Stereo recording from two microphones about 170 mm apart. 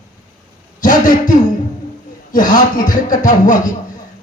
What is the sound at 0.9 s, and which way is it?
A man's voice, 50° left (ahead or behind).